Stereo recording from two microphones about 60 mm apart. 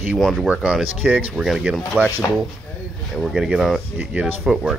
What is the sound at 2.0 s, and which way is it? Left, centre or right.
Speech, right.